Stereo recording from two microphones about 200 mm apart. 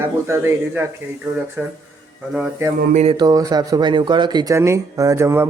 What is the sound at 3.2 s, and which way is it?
Speech, 20° right (ahead or behind).